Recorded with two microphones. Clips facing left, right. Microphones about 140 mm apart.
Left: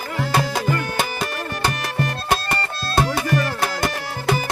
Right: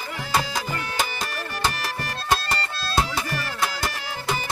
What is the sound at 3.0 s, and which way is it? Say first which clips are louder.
Music: left 6 dB; 55° left (ahead or behind).